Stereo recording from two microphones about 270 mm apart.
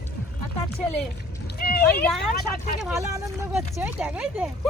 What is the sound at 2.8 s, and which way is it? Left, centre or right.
Speech, centre.